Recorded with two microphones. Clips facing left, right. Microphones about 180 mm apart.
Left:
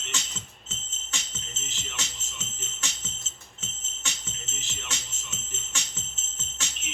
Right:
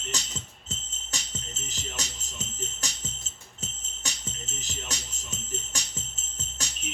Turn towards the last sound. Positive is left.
turn(degrees=-40)  # may be behind; listen again after turning